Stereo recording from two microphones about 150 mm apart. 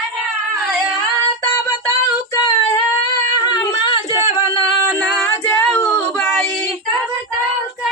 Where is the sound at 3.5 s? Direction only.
30° left (ahead or behind).